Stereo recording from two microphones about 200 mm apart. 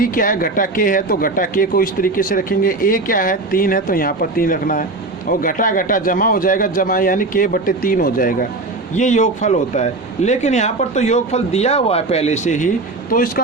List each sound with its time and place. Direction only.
0.0 s speech: 45° left (ahead or behind)